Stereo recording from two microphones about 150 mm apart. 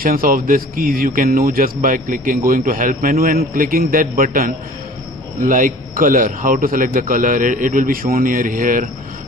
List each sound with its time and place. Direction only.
0.0 s a man's voice: 70° right (ahead or behind)